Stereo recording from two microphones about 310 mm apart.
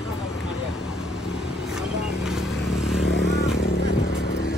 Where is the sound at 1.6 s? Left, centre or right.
Centre.